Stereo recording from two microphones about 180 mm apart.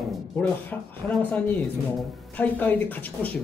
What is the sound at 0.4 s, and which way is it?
Speech, 10° left (ahead or behind).